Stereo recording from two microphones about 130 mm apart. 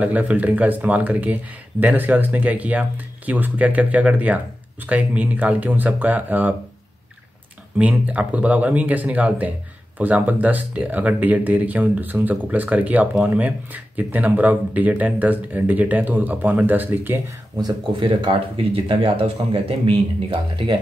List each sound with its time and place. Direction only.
0.0 s speech: 10° right (ahead or behind)
7.7 s speech: 10° right (ahead or behind)
17.6 s speech: 35° right (ahead or behind)